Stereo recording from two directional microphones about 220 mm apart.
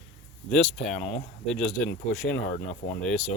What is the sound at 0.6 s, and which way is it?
Speech, 35° left (ahead or behind).